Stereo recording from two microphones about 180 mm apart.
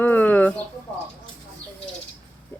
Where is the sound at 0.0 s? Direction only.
10° left (ahead or behind).